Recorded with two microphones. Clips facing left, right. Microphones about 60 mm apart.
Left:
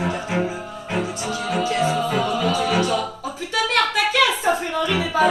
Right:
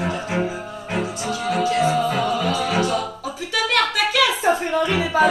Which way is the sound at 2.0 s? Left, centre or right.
Centre.